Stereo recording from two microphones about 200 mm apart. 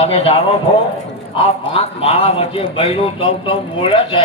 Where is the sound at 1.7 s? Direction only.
30° left (ahead or behind).